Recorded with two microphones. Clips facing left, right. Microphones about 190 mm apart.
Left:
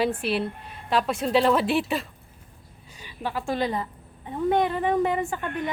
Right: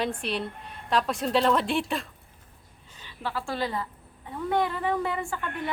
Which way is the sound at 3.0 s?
15° left (ahead or behind).